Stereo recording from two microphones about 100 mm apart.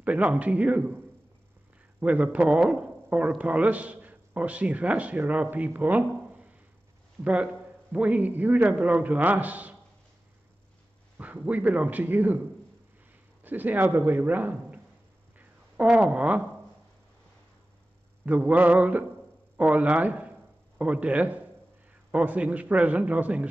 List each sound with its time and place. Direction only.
0.0 s speech: 15° right (ahead or behind)
7.9 s speech: 15° right (ahead or behind)
11.1 s speech: 15° right (ahead or behind)
13.4 s a man's voice: 20° right (ahead or behind)
15.3 s a sound: 15° right (ahead or behind)
18.2 s a man's voice: 15° right (ahead or behind)